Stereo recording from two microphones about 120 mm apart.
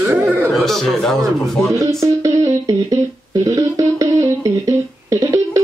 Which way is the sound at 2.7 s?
30° right (ahead or behind).